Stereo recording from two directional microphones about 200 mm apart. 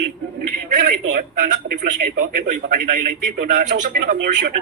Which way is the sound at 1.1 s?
40° right (ahead or behind).